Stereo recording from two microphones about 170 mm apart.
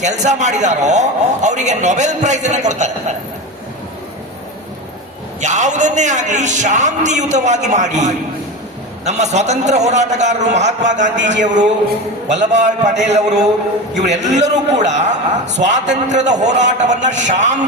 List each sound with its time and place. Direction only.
0.0 s a man's voice: 45° right (ahead or behind)
5.4 s a man's voice: 45° right (ahead or behind)
12.3 s a man's voice: 45° right (ahead or behind)